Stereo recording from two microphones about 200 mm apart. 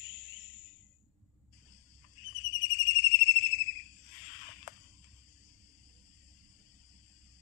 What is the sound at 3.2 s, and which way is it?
Cricket, 70° left (ahead or behind).